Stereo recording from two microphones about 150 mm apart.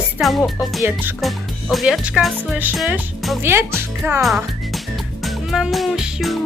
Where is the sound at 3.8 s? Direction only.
15° right (ahead or behind).